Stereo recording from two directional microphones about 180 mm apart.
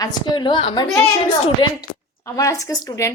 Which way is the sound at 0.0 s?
25° left (ahead or behind).